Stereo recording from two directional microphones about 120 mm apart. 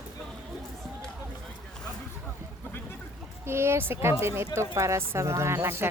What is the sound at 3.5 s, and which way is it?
Speech, 20° right (ahead or behind).